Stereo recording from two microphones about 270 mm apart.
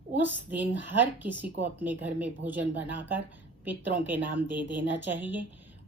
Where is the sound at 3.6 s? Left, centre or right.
Centre.